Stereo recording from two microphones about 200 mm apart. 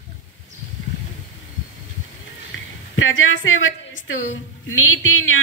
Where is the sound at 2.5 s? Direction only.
70° left (ahead or behind).